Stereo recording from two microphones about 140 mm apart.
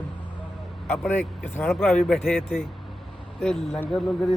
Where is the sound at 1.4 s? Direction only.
15° left (ahead or behind).